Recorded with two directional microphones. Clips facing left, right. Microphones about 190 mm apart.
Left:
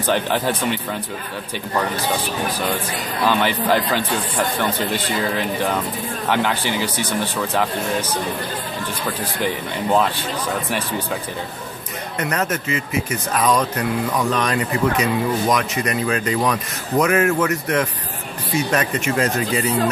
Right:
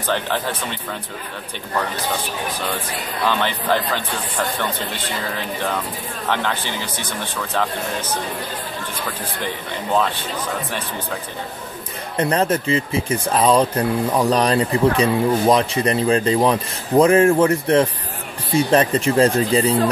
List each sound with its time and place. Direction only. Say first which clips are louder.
0.1 s speech: left 2 dB; 10° left (ahead or behind)
3.3 s speech: left 2 dB; 10° left (ahead or behind)
6.2 s speech: left 3 dB; 10° left (ahead or behind)
12.2 s speech: right 5 dB; 30° right (ahead or behind)